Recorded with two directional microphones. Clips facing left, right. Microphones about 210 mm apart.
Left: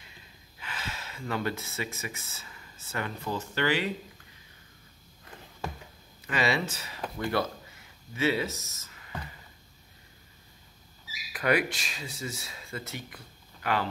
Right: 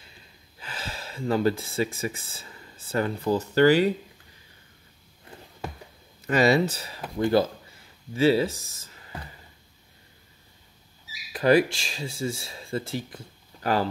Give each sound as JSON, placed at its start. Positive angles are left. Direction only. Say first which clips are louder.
{"t": 0.6, "sound": "speech", "louder": "right 3 dB", "side_deg": -30}
{"t": 6.2, "sound": "speech", "louder": "right 8 dB", "side_deg": -40}
{"t": 8.1, "sound": "speech", "louder": "right 7 dB", "side_deg": -35}
{"t": 11.3, "sound": "speech", "louder": "right 7 dB", "side_deg": -30}